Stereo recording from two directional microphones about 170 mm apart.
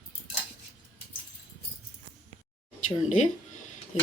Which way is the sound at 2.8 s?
45° left (ahead or behind).